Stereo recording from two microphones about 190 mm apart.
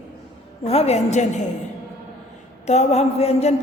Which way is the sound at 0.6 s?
30° left (ahead or behind).